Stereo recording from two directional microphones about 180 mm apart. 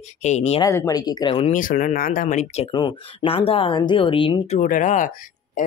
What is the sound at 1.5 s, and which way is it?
Speech, 50° left (ahead or behind).